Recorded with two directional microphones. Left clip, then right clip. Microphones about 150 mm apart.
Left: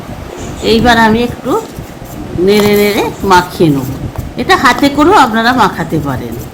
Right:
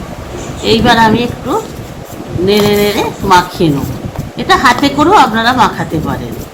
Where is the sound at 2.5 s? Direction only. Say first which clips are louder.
Left 1 dB; 90° left.